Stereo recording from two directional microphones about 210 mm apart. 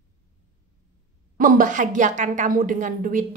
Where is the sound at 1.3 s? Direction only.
40° right (ahead or behind).